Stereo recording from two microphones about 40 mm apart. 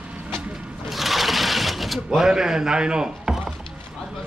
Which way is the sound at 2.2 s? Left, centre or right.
Centre.